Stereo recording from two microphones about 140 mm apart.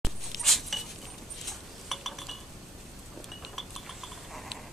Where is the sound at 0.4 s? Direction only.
Centre (ahead or behind).